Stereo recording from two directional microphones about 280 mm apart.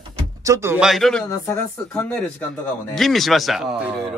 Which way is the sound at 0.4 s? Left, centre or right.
Centre.